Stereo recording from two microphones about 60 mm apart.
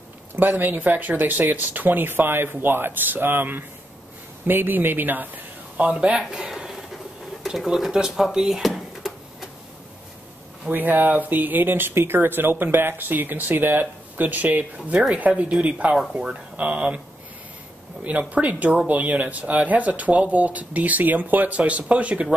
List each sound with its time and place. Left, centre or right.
0.4 s speech: right; by 8.1 s centre
8.3 s a sound: centre
10.7 s speech: right
16.1 s speech: centre
16.5 s speech: right
18.3 s speech: right